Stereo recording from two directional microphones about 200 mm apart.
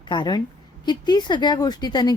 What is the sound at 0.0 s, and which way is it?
A woman's voice, 20° left (ahead or behind).